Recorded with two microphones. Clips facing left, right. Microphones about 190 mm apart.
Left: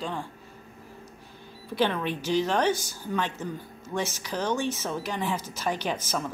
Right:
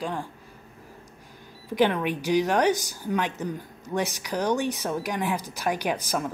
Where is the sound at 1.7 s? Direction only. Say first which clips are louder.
Right 3 dB; 15° right (ahead or behind).